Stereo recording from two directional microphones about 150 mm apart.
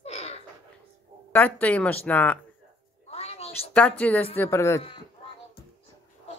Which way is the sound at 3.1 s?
45° left (ahead or behind).